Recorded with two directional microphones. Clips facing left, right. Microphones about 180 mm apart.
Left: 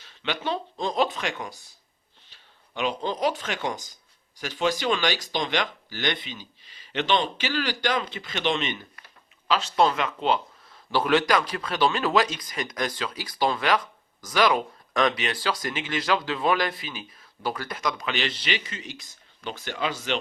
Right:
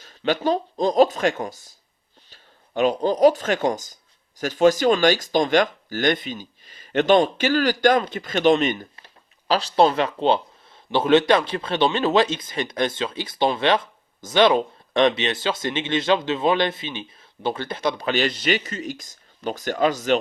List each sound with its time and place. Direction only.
0.0 s speech: 40° right (ahead or behind)